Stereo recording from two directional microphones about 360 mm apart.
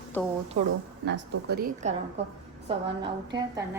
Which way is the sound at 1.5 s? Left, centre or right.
Right.